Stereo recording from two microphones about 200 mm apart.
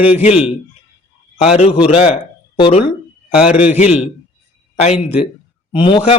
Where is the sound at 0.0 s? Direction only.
30° left (ahead or behind).